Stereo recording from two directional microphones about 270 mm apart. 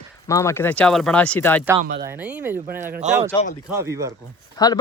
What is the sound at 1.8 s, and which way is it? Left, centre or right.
Speech, right.